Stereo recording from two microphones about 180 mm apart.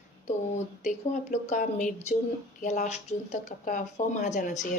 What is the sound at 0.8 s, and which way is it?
Speech, 40° left (ahead or behind).